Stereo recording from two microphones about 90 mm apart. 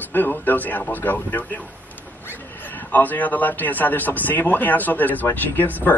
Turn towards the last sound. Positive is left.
turn(degrees=20)  # may be behind; listen again after turning